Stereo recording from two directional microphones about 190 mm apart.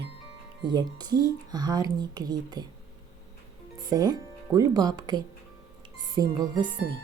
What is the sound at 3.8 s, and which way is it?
Speech, 20° right (ahead or behind).